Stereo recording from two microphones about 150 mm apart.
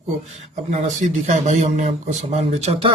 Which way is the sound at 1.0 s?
50° right (ahead or behind).